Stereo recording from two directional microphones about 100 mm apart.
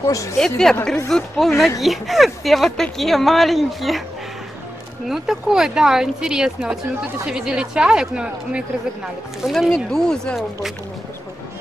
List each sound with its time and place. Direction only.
0.1 s speech: 30° left (ahead or behind)
0.4 s speech: 5° left (ahead or behind)
5.0 s speech: 5° right (ahead or behind)